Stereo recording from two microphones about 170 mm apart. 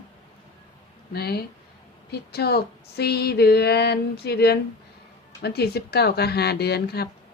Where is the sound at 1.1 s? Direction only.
65° left (ahead or behind).